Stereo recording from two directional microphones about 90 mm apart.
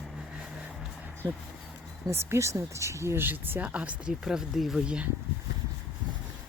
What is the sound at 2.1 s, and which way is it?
Speech, 30° right (ahead or behind).